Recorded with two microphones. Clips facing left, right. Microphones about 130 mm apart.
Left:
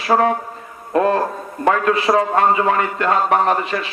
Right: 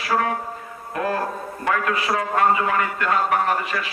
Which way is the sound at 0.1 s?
30° left (ahead or behind).